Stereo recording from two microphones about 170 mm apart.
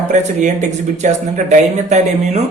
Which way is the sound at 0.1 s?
45° right (ahead or behind).